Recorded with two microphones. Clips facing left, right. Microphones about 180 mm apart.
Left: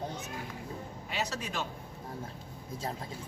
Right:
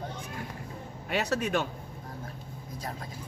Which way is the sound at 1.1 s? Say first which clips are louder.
Right 8 dB; 60° right (ahead or behind).